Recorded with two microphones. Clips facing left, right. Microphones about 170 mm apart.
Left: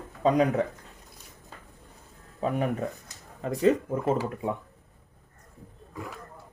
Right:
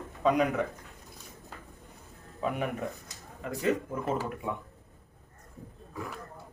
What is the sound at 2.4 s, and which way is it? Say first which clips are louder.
Speech: left 4 dB; 35° left (ahead or behind).